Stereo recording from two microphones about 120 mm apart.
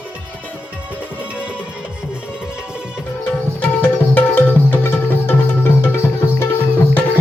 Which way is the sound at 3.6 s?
15° left (ahead or behind).